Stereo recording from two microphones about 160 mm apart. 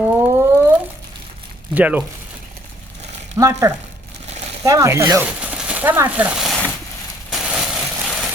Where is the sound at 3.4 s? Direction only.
20° right (ahead or behind); by 6.6 s centre (ahead or behind).